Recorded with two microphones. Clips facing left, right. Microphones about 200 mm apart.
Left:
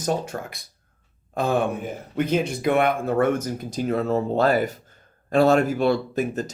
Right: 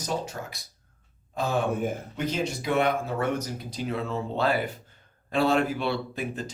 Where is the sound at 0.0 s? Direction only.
55° left (ahead or behind).